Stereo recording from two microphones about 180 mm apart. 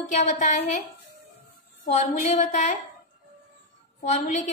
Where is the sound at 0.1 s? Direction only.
40° left (ahead or behind).